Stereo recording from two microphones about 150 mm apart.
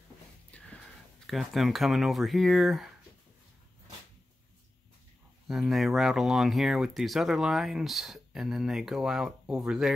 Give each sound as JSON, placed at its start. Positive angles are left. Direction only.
{"t": 0.5, "sound": "gasp", "side_deg": 10}
{"t": 1.2, "sound": "speech", "side_deg": 0}
{"t": 5.5, "sound": "speech", "side_deg": 0}